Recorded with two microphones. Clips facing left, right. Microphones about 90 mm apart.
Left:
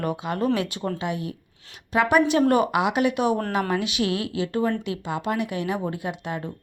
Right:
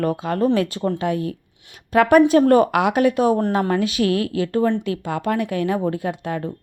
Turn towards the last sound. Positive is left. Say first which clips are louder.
# right 6 dB
turn(degrees=-45)  # may be behind; listen again after turning